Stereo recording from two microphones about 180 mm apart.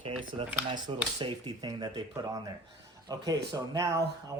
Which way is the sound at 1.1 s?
25° right (ahead or behind).